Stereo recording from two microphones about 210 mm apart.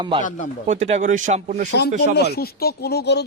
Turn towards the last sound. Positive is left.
turn(degrees=50)  # may be behind; listen again after turning